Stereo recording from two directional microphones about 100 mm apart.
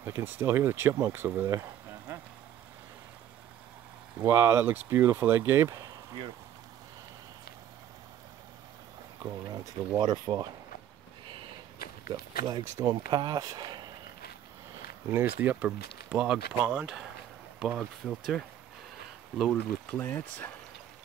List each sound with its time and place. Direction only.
0.0 s speech: 20° right (ahead or behind)
4.2 s speech: 25° right (ahead or behind)
9.2 s speech: 35° right (ahead or behind)
9.9 s speech: 45° right (ahead or behind)
12.1 s speech: 40° right (ahead or behind)
15.0 s speech: 20° right (ahead or behind); by 18.4 s centre (ahead or behind)
19.5 s speech: 15° left (ahead or behind)